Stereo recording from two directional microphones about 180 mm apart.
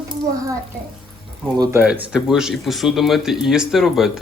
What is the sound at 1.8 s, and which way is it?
Speech, 5° right (ahead or behind).